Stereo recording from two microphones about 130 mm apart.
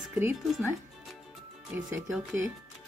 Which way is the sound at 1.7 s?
15° right (ahead or behind).